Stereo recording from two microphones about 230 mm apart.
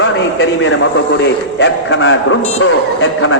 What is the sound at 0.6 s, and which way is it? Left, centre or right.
A man's voice, left.